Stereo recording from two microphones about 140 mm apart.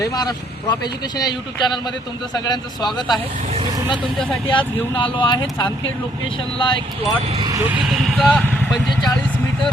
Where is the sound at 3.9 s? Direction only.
Centre (ahead or behind).